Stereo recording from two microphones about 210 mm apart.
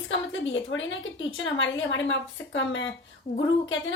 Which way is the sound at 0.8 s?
65° left (ahead or behind).